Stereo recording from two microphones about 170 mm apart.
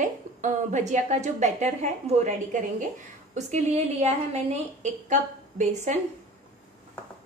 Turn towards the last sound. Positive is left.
turn(degrees=-45)  # may be behind; listen again after turning